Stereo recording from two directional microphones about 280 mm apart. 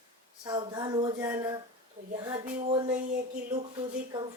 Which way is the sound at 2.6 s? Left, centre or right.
Right.